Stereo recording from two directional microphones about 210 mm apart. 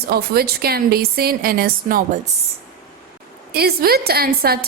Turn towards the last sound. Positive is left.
turn(degrees=-45)  # may be behind; listen again after turning